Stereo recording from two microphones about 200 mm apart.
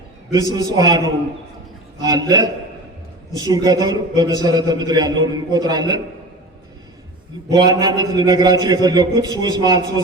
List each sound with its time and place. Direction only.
0.3 s a man's voice: 20° right (ahead or behind)
7.5 s a man's voice: 20° right (ahead or behind)